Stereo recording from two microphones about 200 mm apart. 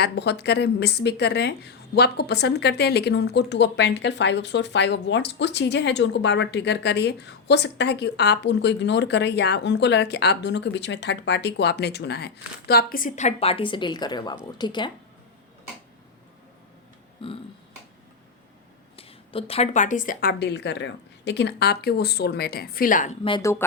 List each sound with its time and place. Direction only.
0.0 s speech: 55° left (ahead or behind); by 14.9 s 20° left (ahead or behind)
17.2 s speech: 25° left (ahead or behind)
18.9 s a woman's voice: 30° left (ahead or behind)
23.4 s speech: 15° left (ahead or behind)